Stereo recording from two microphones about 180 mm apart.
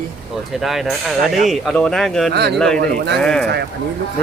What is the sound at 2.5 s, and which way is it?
Speech, 5° left (ahead or behind).